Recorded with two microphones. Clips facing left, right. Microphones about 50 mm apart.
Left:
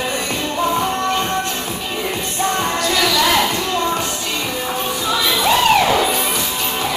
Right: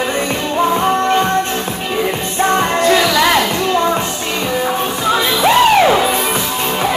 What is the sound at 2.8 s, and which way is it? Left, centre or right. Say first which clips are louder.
Music: right 4 dB; right.